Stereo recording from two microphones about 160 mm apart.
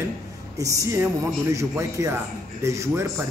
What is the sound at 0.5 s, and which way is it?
A man's voice, 20° right (ahead or behind).